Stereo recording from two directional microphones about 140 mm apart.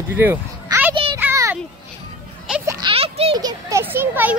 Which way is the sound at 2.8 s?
45° right (ahead or behind).